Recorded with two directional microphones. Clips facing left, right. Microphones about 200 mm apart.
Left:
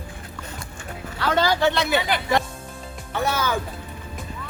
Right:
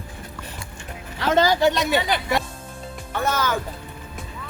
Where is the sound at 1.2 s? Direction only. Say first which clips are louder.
Right 2 dB; 15° right (ahead or behind).